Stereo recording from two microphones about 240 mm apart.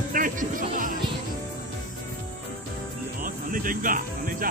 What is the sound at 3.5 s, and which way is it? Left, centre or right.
Speech, right.